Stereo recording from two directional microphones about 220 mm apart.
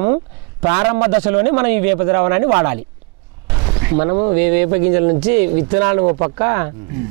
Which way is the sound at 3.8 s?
15° right (ahead or behind).